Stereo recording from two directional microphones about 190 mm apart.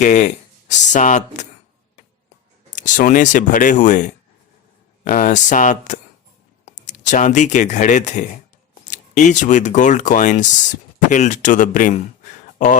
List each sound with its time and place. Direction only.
0.0 s speech: 40° left (ahead or behind)
2.7 s speech: 40° left (ahead or behind)